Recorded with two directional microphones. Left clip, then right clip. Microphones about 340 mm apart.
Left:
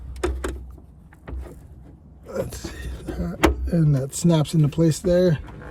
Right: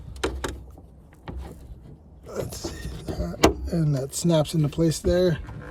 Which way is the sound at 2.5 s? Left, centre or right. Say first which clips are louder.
Right 1 dB; centre.